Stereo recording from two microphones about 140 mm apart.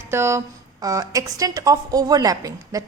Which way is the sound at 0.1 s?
20° right (ahead or behind).